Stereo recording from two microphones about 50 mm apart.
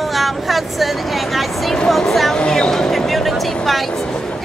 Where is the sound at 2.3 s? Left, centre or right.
Centre.